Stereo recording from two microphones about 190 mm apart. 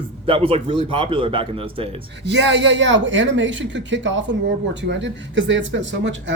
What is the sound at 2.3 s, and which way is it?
Speech, 70° right (ahead or behind).